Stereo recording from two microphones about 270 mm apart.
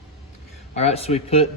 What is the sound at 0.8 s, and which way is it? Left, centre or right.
Speech, left.